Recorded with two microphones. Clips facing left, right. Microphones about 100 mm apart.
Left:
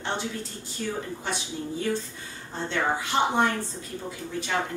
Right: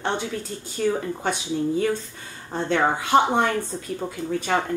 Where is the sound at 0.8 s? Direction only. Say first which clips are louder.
Right 9 dB; 80° right.